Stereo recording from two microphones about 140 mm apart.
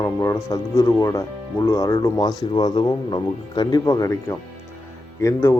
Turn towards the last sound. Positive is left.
turn(degrees=20)  # may be behind; listen again after turning